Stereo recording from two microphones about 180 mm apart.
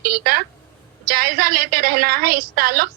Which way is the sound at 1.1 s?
55° right (ahead or behind).